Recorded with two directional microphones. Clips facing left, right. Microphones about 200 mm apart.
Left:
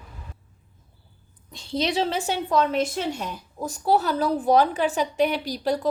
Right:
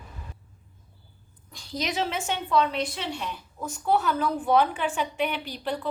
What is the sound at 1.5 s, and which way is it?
A woman's voice, 25° left (ahead or behind).